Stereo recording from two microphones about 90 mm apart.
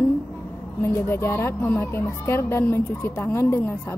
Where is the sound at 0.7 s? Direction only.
30° left (ahead or behind).